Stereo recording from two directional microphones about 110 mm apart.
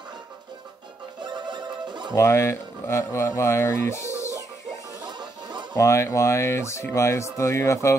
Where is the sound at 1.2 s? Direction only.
45° right (ahead or behind).